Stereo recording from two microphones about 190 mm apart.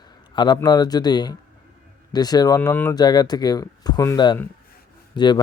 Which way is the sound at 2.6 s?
10° left (ahead or behind).